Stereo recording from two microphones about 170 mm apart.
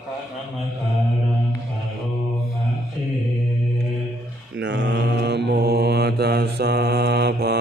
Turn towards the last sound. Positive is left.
turn(degrees=-75)  # may be behind; listen again after turning